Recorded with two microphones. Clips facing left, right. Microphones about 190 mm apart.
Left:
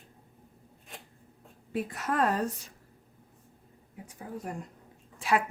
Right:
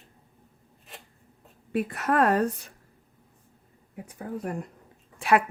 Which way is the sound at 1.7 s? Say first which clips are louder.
Right 6 dB; 60° right (ahead or behind).